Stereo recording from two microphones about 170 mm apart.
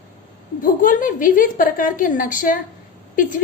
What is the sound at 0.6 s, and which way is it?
A woman's voice, 55° left (ahead or behind).